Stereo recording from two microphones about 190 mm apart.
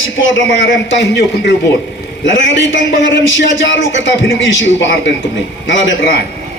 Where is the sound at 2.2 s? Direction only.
80° left.